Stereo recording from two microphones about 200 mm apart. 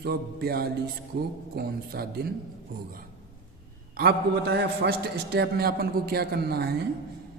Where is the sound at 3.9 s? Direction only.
55° right (ahead or behind).